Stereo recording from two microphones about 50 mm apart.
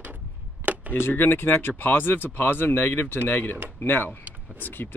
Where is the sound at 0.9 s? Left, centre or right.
Left.